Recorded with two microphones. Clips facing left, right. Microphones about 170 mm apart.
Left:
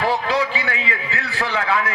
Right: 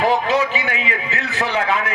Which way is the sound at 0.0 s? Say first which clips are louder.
Right 3 dB; 20° right (ahead or behind).